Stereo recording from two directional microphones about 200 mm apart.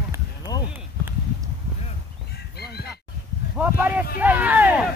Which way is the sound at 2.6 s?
55° left (ahead or behind).